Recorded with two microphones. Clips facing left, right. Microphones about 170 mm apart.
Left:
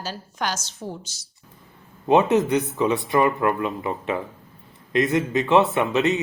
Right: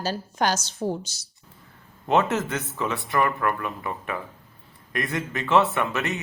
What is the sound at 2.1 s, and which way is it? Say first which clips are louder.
Speech: left 5 dB; 15° left (ahead or behind).